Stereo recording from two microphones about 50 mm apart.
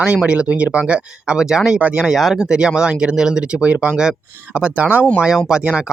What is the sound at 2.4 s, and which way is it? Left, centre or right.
Speech, centre.